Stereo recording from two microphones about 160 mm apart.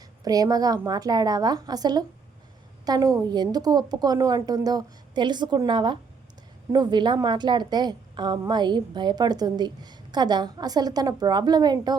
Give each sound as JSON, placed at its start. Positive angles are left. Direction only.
{"t": 0.3, "sound": "a woman's voice", "side_deg": -25}